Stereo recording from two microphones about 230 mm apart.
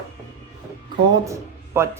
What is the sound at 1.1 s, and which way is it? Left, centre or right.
Speech, centre.